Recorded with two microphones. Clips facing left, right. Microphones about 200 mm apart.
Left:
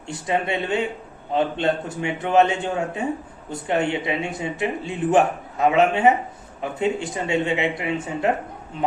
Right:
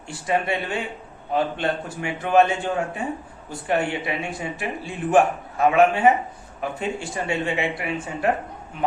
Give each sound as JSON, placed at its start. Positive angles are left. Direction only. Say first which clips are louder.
{"t": 0.1, "sound": "speech", "louder": "even", "side_deg": 20}